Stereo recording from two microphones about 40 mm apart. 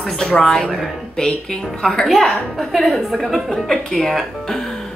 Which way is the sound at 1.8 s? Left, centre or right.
Centre.